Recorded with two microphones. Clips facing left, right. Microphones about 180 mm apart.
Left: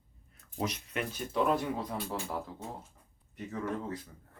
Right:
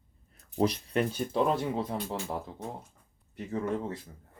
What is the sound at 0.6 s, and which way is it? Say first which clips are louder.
Speech: right 8 dB; 35° right (ahead or behind).